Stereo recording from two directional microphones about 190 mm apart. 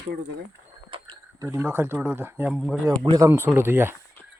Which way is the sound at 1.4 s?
15° right (ahead or behind).